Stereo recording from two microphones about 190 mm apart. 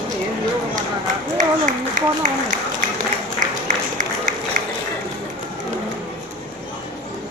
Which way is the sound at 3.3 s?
45° right (ahead or behind).